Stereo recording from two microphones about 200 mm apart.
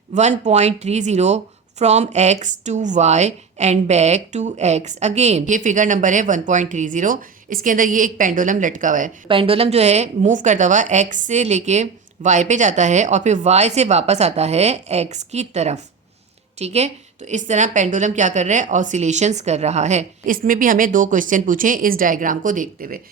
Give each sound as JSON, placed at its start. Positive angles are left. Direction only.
{"t": 0.1, "sound": "a woman's voice", "side_deg": -35}
{"t": 9.2, "sound": "a woman's voice", "side_deg": -25}